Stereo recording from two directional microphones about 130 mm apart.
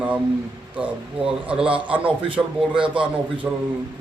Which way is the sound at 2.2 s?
40° right (ahead or behind).